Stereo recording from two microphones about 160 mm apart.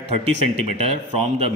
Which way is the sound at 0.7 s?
40° right (ahead or behind).